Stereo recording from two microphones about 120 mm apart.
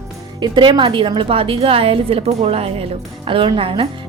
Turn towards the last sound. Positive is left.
turn(degrees=-50)  # may be behind; listen again after turning